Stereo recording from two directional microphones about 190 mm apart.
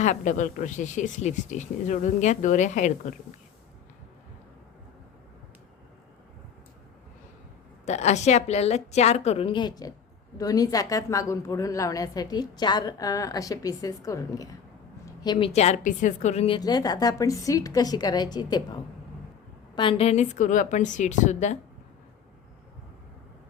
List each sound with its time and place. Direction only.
0.0 s speech: 40° left (ahead or behind)
7.9 s a woman's voice: 35° left (ahead or behind)
16.6 s a woman's voice: 20° left (ahead or behind)
19.7 s speech: 25° left (ahead or behind)